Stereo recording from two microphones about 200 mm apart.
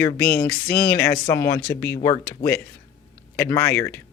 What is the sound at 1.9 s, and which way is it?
Speech, 20° left (ahead or behind).